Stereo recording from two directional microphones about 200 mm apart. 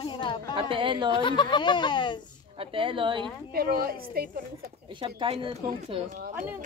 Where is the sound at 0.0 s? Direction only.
20° left (ahead or behind).